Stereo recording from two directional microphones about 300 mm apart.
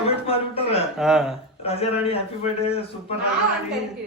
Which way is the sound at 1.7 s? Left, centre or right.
Centre.